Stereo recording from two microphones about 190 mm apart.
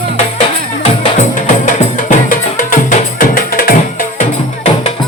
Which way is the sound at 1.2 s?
45° left (ahead or behind).